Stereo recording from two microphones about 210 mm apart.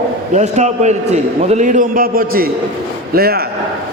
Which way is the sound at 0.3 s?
35° right (ahead or behind).